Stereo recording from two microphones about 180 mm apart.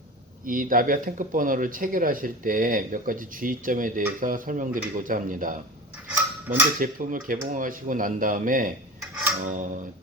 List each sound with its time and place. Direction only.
0.4 s speech: 50° right (ahead or behind)
6.1 s cutlery: 10° right (ahead or behind)
6.7 s speech: 50° right (ahead or behind)